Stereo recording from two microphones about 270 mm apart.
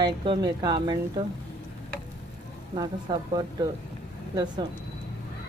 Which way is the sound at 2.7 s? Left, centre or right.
Centre.